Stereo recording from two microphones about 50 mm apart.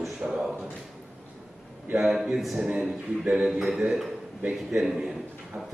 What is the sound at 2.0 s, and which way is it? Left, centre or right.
Speech, centre.